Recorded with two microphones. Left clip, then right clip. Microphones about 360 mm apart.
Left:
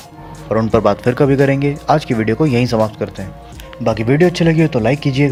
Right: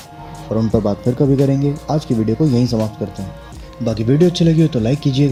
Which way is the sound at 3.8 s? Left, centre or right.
Left.